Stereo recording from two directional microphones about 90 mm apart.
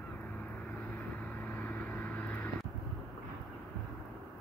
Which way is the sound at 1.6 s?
20° left (ahead or behind).